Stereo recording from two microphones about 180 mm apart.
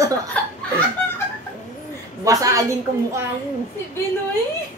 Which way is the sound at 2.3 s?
20° right (ahead or behind).